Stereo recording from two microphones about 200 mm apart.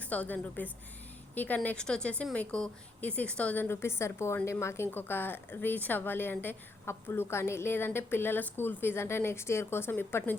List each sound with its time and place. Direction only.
0.0 s a woman's voice: 5° left (ahead or behind)